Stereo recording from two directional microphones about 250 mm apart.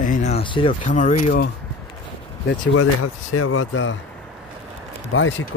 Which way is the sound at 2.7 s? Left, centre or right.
Left.